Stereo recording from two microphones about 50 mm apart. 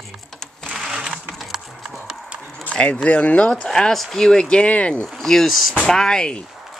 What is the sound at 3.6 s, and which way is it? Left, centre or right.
Speech, centre.